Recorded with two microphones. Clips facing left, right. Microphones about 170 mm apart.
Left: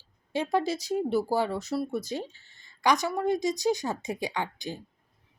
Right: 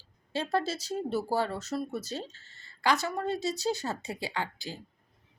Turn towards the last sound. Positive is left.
turn(degrees=20)  # may be behind; listen again after turning